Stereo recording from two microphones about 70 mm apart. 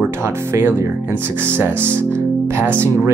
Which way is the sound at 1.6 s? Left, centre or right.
Right.